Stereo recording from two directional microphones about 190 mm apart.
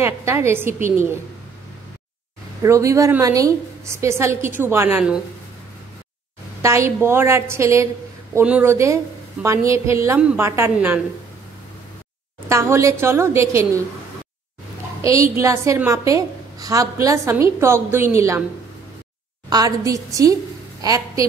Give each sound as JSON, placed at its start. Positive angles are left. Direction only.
{"t": 0.0, "sound": "a woman's voice", "side_deg": -15}
{"t": 2.6, "sound": "a woman's voice", "side_deg": -15}
{"t": 6.6, "sound": "a woman's voice", "side_deg": -15}
{"t": 12.4, "sound": "a woman's voice", "side_deg": -15}
{"t": 15.3, "sound": "a woman's voice", "side_deg": -15}
{"t": 19.5, "sound": "a woman's voice", "side_deg": -20}